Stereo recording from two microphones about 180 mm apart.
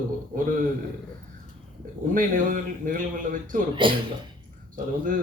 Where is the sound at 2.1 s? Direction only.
50° right (ahead or behind).